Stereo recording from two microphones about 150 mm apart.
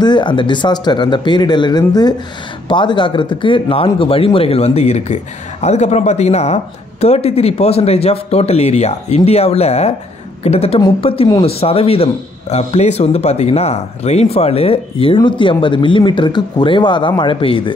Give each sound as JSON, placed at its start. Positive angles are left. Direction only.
{"t": 0.0, "sound": "a man's voice", "side_deg": 30}